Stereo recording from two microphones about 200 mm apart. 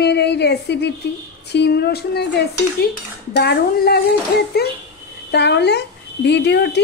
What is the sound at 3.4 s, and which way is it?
Speech, 50° left (ahead or behind).